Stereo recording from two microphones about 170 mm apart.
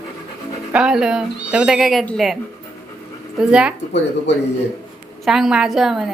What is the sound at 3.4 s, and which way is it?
Speech, 5° right (ahead or behind).